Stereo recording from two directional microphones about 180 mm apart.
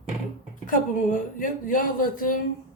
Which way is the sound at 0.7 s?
50° left (ahead or behind).